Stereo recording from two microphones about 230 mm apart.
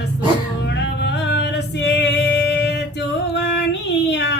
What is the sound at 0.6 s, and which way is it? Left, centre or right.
Music, left.